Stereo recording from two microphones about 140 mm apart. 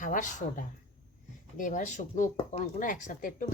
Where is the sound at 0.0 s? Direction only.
65° left (ahead or behind).